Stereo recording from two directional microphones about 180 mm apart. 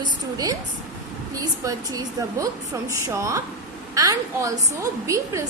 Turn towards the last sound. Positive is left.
turn(degrees=-15)  # may be behind; listen again after turning